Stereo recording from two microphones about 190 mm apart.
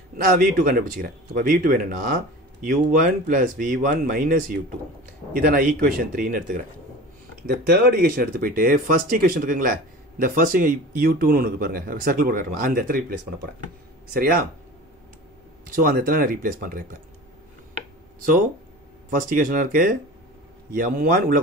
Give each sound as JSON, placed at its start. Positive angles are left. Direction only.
{"t": 0.3, "sound": "speech", "side_deg": -45}
{"t": 7.6, "sound": "speech", "side_deg": -55}
{"t": 14.1, "sound": "speech", "side_deg": -50}
{"t": 15.7, "sound": "speech", "side_deg": -50}
{"t": 19.0, "sound": "speech", "side_deg": -45}